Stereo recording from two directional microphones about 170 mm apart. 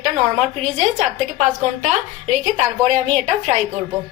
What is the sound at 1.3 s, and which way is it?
A woman's voice, 45° right (ahead or behind).